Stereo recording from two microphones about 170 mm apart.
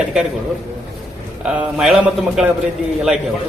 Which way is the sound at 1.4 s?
5° right (ahead or behind).